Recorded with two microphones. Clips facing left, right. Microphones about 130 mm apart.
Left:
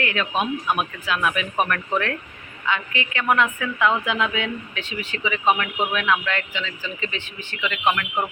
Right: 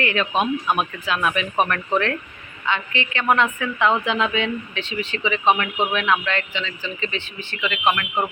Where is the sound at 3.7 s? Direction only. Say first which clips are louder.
Right 1 dB; 25° right (ahead or behind).